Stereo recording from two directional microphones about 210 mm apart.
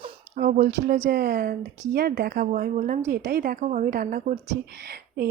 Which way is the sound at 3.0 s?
50° right (ahead or behind).